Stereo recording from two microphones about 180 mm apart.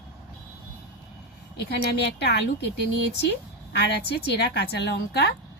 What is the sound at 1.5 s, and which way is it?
Speech, 65° left (ahead or behind).